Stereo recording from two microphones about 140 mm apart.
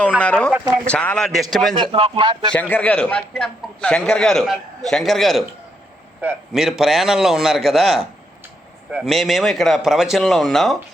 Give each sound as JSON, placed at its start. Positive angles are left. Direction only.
{"t": 0.2, "sound": "a man's voice", "side_deg": 10}
{"t": 1.7, "sound": "speech", "side_deg": -40}
{"t": 2.5, "sound": "a man's voice", "side_deg": 10}
{"t": 6.5, "sound": "a man's voice", "side_deg": 0}